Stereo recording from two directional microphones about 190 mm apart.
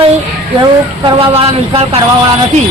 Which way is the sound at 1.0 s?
30° right (ahead or behind).